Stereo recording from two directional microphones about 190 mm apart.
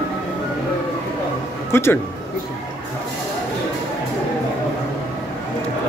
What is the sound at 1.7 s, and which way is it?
Speech, 15° left (ahead or behind).